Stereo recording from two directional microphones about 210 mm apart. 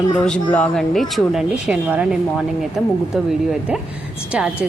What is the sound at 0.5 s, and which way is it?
A woman's voice, 5° left (ahead or behind).